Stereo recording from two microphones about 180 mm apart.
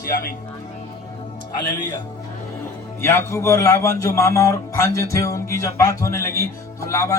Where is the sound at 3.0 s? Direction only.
15° left (ahead or behind).